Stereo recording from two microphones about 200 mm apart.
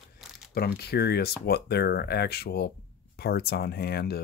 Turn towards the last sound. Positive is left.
turn(degrees=55)  # may be behind; listen again after turning